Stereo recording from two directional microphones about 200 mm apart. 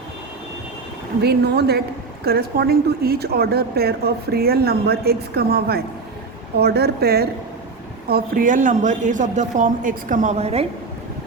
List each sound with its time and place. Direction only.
1.2 s a woman's voice: 55° right (ahead or behind); by 10.7 s 30° right (ahead or behind)